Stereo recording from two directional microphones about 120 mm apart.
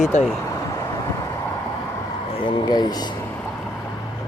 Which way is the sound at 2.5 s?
35° left (ahead or behind).